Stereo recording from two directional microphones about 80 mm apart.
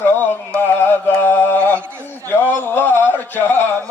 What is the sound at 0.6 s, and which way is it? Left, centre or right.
Music, left.